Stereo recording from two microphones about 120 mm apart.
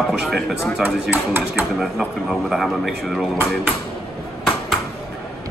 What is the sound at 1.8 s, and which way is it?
Speech, centre (ahead or behind).